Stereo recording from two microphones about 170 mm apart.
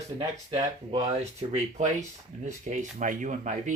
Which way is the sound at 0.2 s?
25° right (ahead or behind).